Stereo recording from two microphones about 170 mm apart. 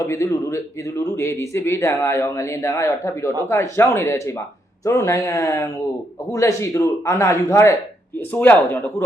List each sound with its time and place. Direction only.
0.0 s speech: 20° left (ahead or behind)